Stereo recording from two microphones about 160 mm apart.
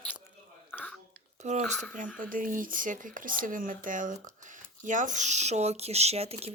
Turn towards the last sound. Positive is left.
turn(degrees=-40)  # may be behind; listen again after turning